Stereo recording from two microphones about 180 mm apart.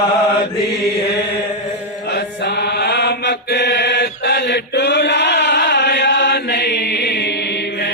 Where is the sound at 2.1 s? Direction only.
65° left (ahead or behind).